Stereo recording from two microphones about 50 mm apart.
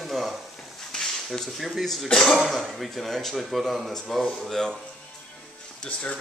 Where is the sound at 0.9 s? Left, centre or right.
Centre.